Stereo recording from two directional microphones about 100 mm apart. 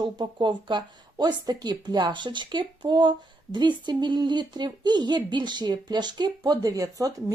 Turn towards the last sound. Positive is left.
turn(degrees=-35)  # may be behind; listen again after turning